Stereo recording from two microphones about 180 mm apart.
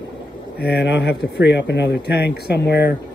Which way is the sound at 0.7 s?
75° left (ahead or behind).